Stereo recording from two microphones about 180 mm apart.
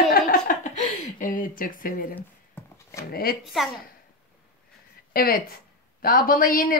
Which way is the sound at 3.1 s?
55° left (ahead or behind).